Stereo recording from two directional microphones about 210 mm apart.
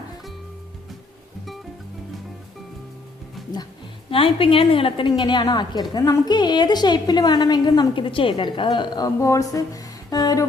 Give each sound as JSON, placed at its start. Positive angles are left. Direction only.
{"t": 4.1, "sound": "a woman's voice", "side_deg": 25}